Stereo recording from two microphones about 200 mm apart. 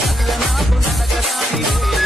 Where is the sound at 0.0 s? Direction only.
Centre (ahead or behind).